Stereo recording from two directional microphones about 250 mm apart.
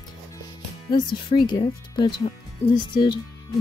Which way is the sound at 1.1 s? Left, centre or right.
Centre.